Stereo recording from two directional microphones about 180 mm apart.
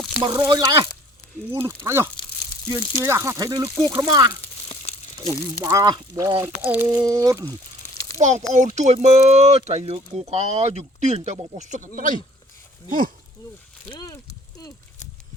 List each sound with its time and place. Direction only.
0.2 s speech: 25° right (ahead or behind)
1.6 s speech: 15° right (ahead or behind)
4.7 s crumpling: 30° left (ahead or behind)
5.3 s speech: 20° right (ahead or behind)
8.2 s speech: 40° right (ahead or behind)
13.9 s speech: 20° left (ahead or behind)